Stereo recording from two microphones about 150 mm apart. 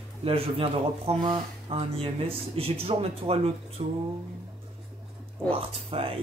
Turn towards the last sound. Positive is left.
turn(degrees=-40)  # may be behind; listen again after turning